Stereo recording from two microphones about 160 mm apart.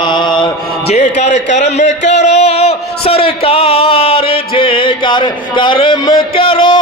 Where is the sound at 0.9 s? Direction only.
45° left (ahead or behind).